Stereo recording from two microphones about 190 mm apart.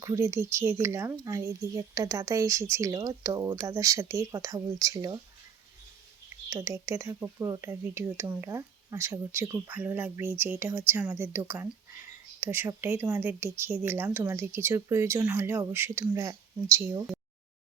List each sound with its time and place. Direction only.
0.0 s speech: 15° right (ahead or behind)
6.5 s speech: 15° right (ahead or behind)